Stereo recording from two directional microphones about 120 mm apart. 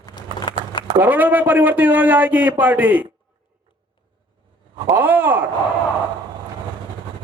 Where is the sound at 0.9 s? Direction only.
15° right (ahead or behind).